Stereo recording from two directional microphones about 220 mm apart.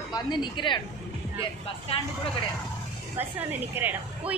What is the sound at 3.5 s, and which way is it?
Speech, 10° right (ahead or behind).